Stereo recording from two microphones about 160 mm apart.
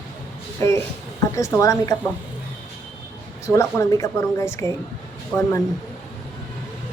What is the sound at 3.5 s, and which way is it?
Speech, 20° left (ahead or behind).